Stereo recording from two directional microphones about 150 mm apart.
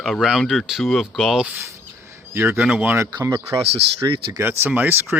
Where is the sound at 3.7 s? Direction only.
40° right (ahead or behind).